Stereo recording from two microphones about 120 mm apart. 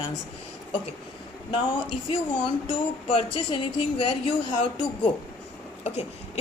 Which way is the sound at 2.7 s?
50° left (ahead or behind).